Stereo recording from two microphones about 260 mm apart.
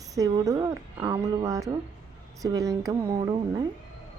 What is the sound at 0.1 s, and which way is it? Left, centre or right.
Speech, centre.